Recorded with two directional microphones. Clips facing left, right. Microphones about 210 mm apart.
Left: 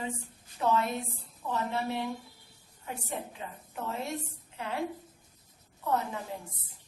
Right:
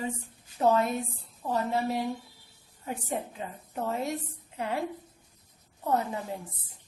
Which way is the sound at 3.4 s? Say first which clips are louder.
Right 3 dB; 30° right (ahead or behind).